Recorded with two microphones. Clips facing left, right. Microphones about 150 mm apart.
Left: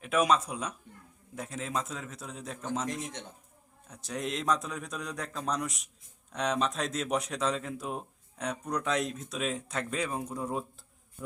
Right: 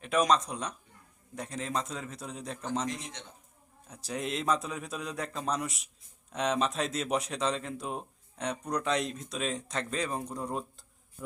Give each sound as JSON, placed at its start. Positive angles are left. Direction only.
{"t": 0.0, "sound": "speech", "side_deg": 5}
{"t": 3.8, "sound": "speech", "side_deg": 0}